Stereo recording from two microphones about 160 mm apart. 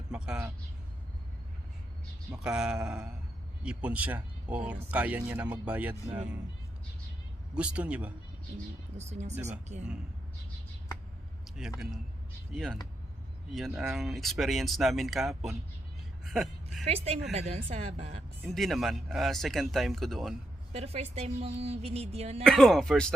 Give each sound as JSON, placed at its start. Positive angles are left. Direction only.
{"t": 0.1, "sound": "vehicle", "side_deg": -5}
{"t": 2.3, "sound": "speech", "side_deg": -5}
{"t": 7.5, "sound": "speech", "side_deg": -5}
{"t": 9.0, "sound": "speech", "side_deg": -45}
{"t": 11.6, "sound": "speech", "side_deg": -5}
{"t": 16.8, "sound": "speech", "side_deg": -40}
{"t": 18.4, "sound": "speech", "side_deg": 0}
{"t": 20.7, "sound": "speech", "side_deg": -40}
{"t": 22.4, "sound": "speech", "side_deg": 5}